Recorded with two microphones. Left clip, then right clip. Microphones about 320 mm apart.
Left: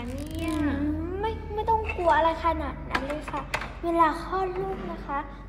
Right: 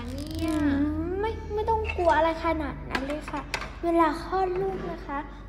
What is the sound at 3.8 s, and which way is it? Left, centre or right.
Speech, right.